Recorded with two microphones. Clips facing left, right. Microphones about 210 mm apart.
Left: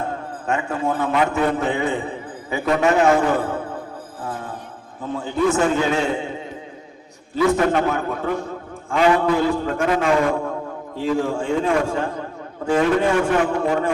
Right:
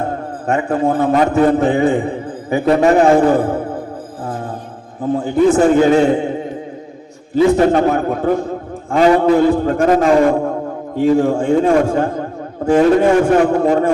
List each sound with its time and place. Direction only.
0.0 s a man's voice: 35° right (ahead or behind)
5.5 s a man's voice: 35° right (ahead or behind)
7.3 s a man's voice: 30° right (ahead or behind)